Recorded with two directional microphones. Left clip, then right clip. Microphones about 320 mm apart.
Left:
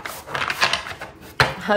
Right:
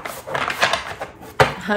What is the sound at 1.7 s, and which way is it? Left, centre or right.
Speech, centre.